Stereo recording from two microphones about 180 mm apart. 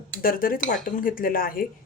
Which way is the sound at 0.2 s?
50° left (ahead or behind).